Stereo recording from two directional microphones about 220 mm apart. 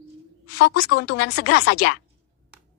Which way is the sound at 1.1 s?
90° left.